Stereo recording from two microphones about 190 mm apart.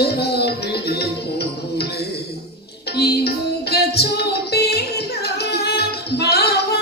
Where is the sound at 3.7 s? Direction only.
55° left (ahead or behind).